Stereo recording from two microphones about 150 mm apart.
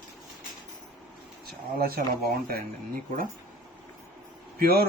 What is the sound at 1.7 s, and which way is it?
Speech, 90° right.